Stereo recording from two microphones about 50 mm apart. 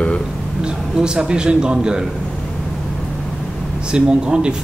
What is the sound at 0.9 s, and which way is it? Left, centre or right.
Speech, centre.